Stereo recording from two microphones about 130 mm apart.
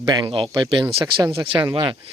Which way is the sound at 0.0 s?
30° right (ahead or behind).